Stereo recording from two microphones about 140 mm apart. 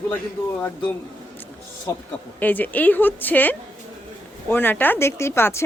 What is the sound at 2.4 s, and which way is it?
Speech, 10° left (ahead or behind).